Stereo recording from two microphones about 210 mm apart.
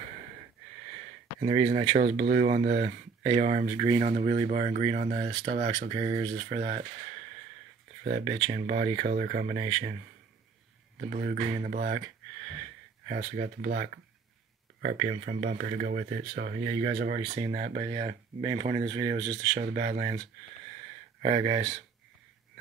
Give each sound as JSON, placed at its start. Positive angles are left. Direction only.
{"t": 1.4, "sound": "speech", "side_deg": -30}
{"t": 2.2, "sound": "speech", "side_deg": -40}
{"t": 3.3, "sound": "speech", "side_deg": -25}
{"t": 5.0, "sound": "speech", "side_deg": -45}
{"t": 5.9, "sound": "speech", "side_deg": -20}
{"t": 6.6, "sound": "speech", "side_deg": -35}
{"t": 8.3, "sound": "speech", "side_deg": -30}
{"t": 9.0, "sound": "speech", "side_deg": -45}
{"t": 11.0, "sound": "speech", "side_deg": -45}
{"t": 13.1, "sound": "speech", "side_deg": -35}
{"t": 15.0, "sound": "speech", "side_deg": -35}
{"t": 16.6, "sound": "speech", "side_deg": -25}
{"t": 19.6, "sound": "speech", "side_deg": -35}
{"t": 21.2, "sound": "speech", "side_deg": -25}